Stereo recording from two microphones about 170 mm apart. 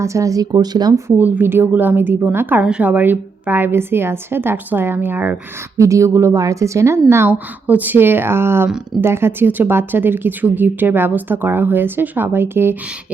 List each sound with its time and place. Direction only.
0.0 s speech: 20° right (ahead or behind)